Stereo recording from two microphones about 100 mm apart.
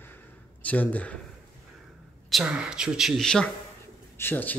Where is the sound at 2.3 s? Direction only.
5° right (ahead or behind).